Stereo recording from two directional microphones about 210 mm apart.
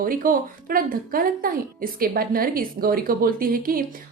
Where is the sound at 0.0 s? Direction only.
40° right (ahead or behind).